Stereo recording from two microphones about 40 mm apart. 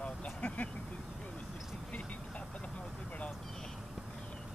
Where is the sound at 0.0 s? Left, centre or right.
Left.